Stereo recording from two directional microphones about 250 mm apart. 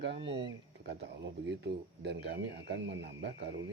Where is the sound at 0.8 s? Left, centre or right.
Right.